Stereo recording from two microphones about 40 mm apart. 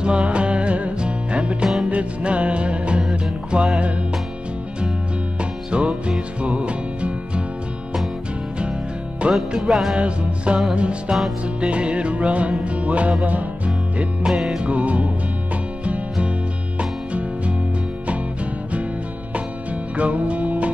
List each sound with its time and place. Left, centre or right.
0.0 s music: right
5.4 s music: right
9.2 s music: right
9.6 s music: centre
9.9 s music: right
14.6 s music: right
18.0 s music: right
20.0 s music: right